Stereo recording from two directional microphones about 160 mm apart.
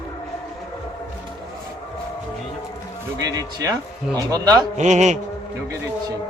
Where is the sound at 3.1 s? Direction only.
25° right (ahead or behind).